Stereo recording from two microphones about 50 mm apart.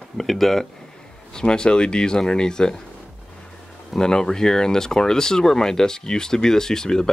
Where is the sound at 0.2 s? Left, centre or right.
Centre.